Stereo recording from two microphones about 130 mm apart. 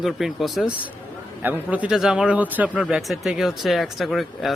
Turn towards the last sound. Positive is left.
turn(degrees=0)  # may be behind; listen again after turning